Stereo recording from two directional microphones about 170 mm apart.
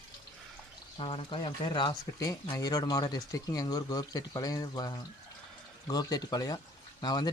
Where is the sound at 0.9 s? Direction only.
30° left (ahead or behind).